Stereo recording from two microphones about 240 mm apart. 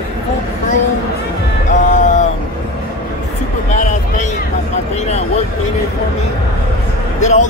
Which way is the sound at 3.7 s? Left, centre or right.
Left.